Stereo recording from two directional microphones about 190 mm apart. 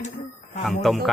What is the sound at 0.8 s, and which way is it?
Speech, centre (ahead or behind).